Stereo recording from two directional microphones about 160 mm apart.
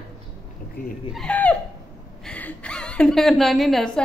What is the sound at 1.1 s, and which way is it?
A woman's voice, 10° left (ahead or behind).